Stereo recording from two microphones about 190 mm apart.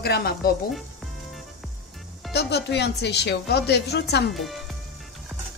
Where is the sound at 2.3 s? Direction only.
60° left (ahead or behind).